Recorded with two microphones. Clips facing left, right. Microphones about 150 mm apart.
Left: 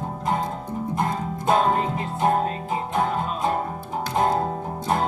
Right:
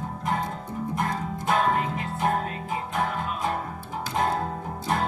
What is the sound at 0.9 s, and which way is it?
Music, 25° left (ahead or behind).